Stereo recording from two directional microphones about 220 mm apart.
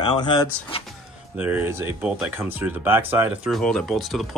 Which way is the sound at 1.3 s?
10° right (ahead or behind).